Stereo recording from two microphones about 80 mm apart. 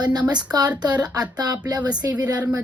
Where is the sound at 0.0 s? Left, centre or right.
Right.